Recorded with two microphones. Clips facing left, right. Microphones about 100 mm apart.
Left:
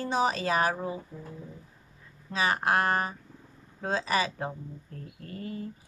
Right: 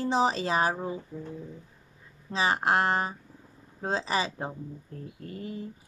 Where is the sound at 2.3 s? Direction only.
25° right (ahead or behind).